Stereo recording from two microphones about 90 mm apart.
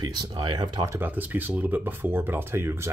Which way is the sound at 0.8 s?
20° right (ahead or behind).